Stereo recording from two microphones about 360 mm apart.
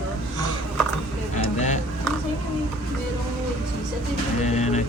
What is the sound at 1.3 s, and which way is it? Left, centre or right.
Music, centre.